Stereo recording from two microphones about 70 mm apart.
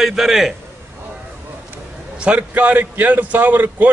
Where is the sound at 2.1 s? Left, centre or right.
Centre.